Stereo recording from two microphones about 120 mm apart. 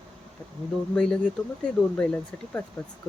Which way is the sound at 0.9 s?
5° left (ahead or behind).